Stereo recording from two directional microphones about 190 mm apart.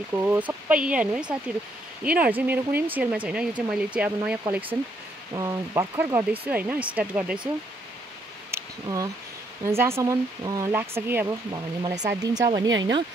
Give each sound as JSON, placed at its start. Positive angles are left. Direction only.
{"t": 0.1, "sound": "speech", "side_deg": -10}
{"t": 8.5, "sound": "a sound", "side_deg": -15}
{"t": 9.7, "sound": "speech", "side_deg": -15}